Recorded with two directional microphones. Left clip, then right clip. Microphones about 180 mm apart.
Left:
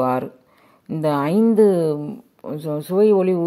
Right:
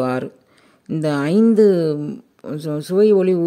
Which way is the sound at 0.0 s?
30° right (ahead or behind).